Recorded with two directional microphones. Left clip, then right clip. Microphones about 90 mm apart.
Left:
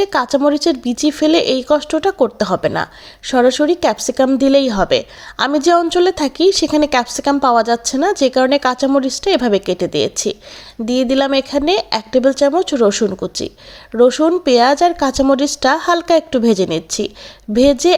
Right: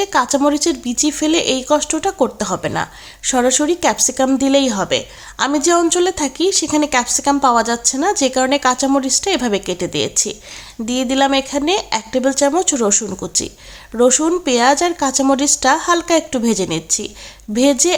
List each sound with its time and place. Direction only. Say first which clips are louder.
0.0 s a woman's voice: left 1 dB; 40° left (ahead or behind)
3.2 s a woman's voice: left 3 dB; 25° left (ahead or behind)
14.4 s a woman's voice: left 3 dB; 35° left (ahead or behind)